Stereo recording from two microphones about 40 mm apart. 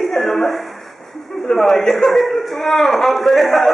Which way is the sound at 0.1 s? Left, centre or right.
Centre.